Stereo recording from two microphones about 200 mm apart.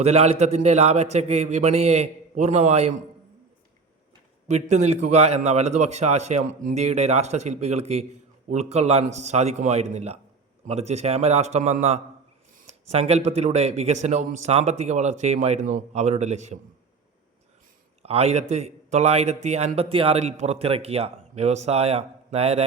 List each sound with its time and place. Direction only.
0.0 s a man's voice: 30° right (ahead or behind)
4.4 s a man's voice: 35° right (ahead or behind)
18.0 s a man's voice: 30° right (ahead or behind)